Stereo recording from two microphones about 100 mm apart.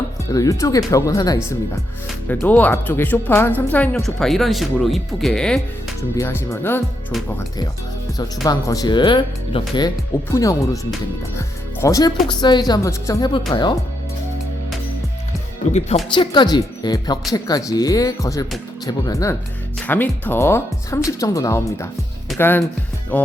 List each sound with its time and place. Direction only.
0.3 s speech: 35° left (ahead or behind)
2.3 s speech: 15° left (ahead or behind)
3.9 s speech: 5° left (ahead or behind)
6.1 s speech: 30° left (ahead or behind)
8.4 s speech: 35° left (ahead or behind); by 9.8 s 55° left (ahead or behind)
10.2 s speech: 35° left (ahead or behind)
12.4 s speech: 45° left (ahead or behind)
13.5 s speech: 50° left (ahead or behind)
16.1 s speech: 50° left (ahead or behind); by 19.4 s 30° left (ahead or behind)
19.9 s speech: 20° left (ahead or behind)
22.4 s speech: 20° left (ahead or behind)